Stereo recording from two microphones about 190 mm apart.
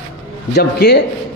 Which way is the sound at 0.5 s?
60° left (ahead or behind).